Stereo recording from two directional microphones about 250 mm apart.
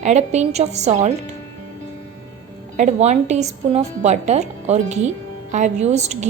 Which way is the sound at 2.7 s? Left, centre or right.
Right.